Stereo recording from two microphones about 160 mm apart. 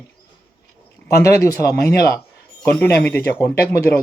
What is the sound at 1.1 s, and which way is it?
Speech, 20° left (ahead or behind).